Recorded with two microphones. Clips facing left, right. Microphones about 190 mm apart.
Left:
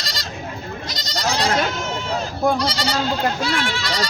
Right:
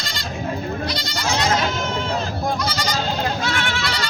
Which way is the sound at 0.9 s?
40° left (ahead or behind).